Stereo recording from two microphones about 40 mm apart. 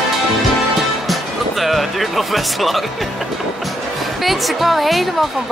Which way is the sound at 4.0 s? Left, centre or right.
Centre.